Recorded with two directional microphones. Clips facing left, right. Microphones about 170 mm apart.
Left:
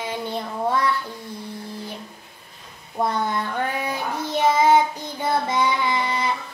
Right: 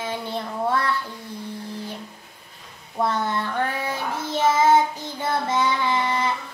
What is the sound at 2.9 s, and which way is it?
Child singing, 15° left (ahead or behind).